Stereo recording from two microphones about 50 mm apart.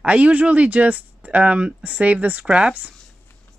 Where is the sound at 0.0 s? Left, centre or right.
Right.